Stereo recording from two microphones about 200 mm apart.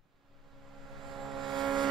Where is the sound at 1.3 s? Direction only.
Centre (ahead or behind).